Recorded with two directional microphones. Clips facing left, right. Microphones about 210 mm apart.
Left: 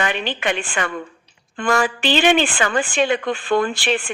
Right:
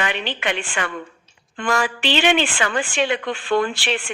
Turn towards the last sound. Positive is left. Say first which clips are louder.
# left 2 dB
turn(degrees=45)  # may be behind; listen again after turning